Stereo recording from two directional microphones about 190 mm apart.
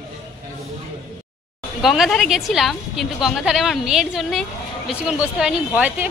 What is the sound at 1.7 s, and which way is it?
A woman's voice, centre (ahead or behind).